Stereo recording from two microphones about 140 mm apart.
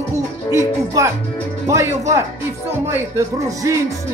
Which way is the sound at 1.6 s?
20° right (ahead or behind).